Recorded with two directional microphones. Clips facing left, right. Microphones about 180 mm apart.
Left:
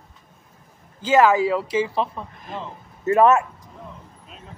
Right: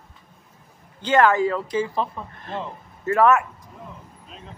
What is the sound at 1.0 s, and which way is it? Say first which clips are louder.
Speech: left 1 dB; 5° left (ahead or behind).